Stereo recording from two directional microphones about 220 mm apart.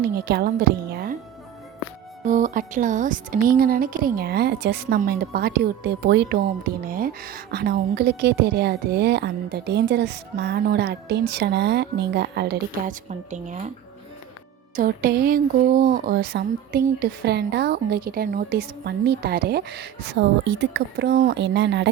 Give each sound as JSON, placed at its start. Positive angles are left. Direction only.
{"t": 0.0, "sound": "a woman's voice", "side_deg": -45}
{"t": 2.2, "sound": "a woman's voice", "side_deg": -35}
{"t": 14.8, "sound": "a woman's voice", "side_deg": -40}